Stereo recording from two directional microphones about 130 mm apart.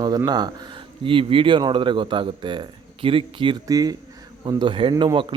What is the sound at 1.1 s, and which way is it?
Speech, 45° right (ahead or behind).